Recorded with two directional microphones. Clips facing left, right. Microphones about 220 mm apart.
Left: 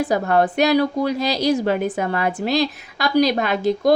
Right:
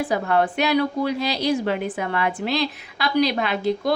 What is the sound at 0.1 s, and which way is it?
A woman's voice, 40° left (ahead or behind).